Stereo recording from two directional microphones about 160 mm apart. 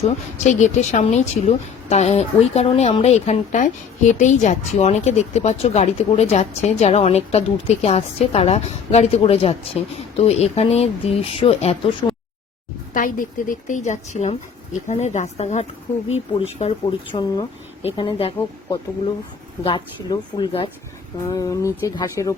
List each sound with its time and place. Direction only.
0.0 s a woman's voice: 45° left (ahead or behind)
12.9 s a woman's voice: 55° left (ahead or behind); by 17.2 s 40° left (ahead or behind)
17.2 s speech: 25° left (ahead or behind)
19.6 s speech: 30° left (ahead or behind)
21.2 s speech: 20° left (ahead or behind)